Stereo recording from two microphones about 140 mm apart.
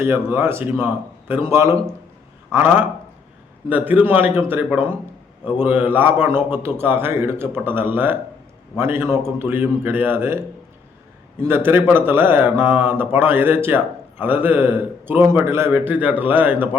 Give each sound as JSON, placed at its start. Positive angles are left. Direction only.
{"t": 0.0, "sound": "speech", "side_deg": -15}